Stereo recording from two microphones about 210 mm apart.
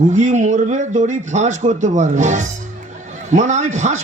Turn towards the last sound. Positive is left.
turn(degrees=-35)  # may be behind; listen again after turning